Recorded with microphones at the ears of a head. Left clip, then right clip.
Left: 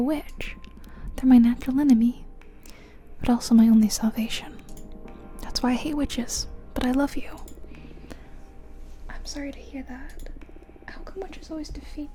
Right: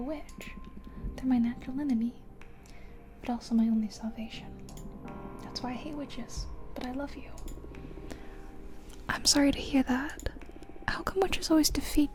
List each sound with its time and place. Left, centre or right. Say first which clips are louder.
0.0 s a woman's voice: left 11 dB; left
3.2 s a woman's voice: left 11 dB; left
9.0 s speech: right 10 dB; right